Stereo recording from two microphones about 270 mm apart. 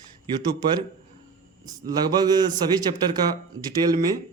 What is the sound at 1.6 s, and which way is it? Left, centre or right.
A man's voice, centre.